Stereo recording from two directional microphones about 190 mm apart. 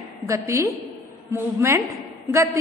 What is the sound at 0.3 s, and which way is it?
A woman's voice, 15° right (ahead or behind).